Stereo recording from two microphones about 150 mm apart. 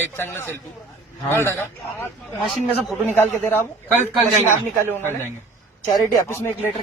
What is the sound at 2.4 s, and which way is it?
Speech, centre (ahead or behind).